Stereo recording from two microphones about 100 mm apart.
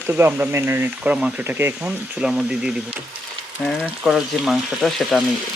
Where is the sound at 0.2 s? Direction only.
25° right (ahead or behind).